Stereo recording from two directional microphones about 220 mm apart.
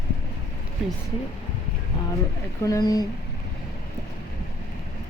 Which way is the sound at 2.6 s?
15° left (ahead or behind).